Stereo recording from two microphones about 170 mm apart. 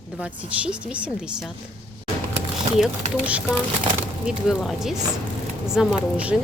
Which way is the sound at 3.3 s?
10° right (ahead or behind).